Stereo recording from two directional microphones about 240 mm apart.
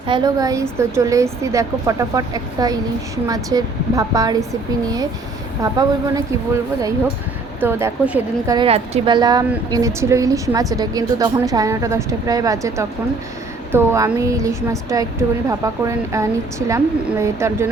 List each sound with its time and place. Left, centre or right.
0.1 s a woman's voice: centre
5.6 s a woman's voice: centre
7.6 s a woman's voice: centre
8.5 s a woman's voice: right